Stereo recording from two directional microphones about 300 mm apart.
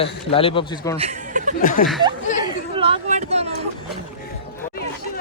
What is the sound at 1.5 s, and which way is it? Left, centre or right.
Speech, left.